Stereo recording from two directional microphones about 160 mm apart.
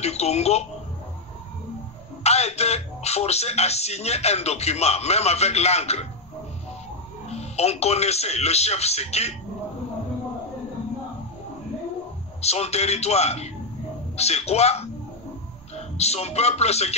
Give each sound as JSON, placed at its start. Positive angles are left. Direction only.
{"t": 0.0, "sound": "speech", "side_deg": 40}
{"t": 2.2, "sound": "speech", "side_deg": 40}
{"t": 7.2, "sound": "speech", "side_deg": 40}
{"t": 12.4, "sound": "a man's voice", "side_deg": 40}